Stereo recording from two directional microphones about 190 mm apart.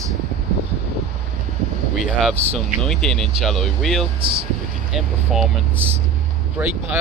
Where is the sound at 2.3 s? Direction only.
35° right (ahead or behind).